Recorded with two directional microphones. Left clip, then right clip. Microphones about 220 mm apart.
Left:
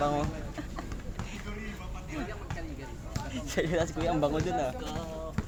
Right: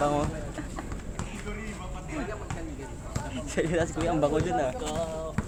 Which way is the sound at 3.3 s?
25° left (ahead or behind).